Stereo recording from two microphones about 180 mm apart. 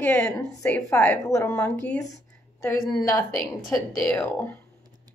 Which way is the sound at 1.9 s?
15° left (ahead or behind).